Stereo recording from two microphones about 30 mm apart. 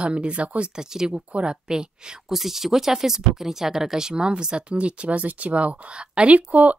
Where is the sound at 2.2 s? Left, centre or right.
Centre; by 5.8 s right.